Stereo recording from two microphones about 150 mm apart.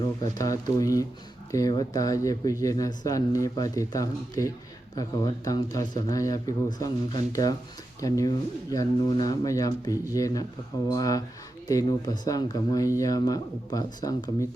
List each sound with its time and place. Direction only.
0.3 s speech: 20° left (ahead or behind)